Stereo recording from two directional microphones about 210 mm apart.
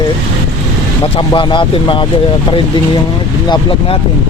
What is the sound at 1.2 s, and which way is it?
Speech, 25° left (ahead or behind).